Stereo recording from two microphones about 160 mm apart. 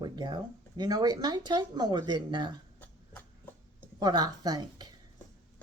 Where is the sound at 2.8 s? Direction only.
10° left (ahead or behind).